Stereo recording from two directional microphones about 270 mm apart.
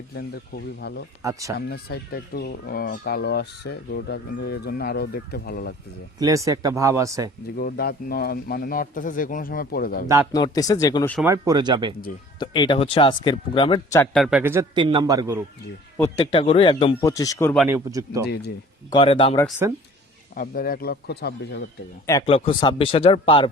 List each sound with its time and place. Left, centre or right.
0.8 s speech: left
1.2 s speech: centre
1.5 s speech: left
6.1 s speech: centre
7.5 s speech: left
10.3 s speech: centre
11.2 s speech: centre
12.4 s speech: centre
16.0 s speech: centre
17.7 s speech: centre
18.9 s speech: centre
19.5 s speech: centre
20.3 s speech: left
22.0 s speech: centre